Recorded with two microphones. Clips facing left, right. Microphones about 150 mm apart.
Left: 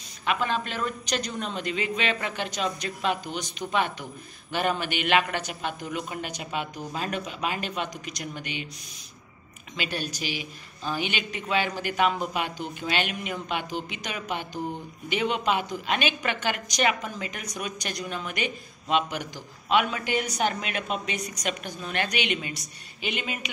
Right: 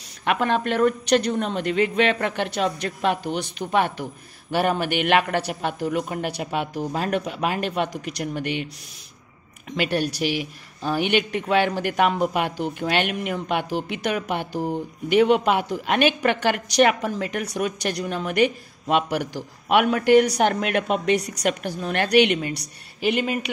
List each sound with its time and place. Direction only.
0.2 s a woman's voice: 60° right (ahead or behind)
9.8 s a woman's voice: 60° right (ahead or behind)